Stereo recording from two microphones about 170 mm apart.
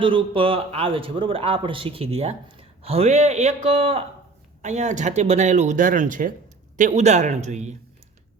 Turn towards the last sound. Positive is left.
turn(degrees=-45)  # may be behind; listen again after turning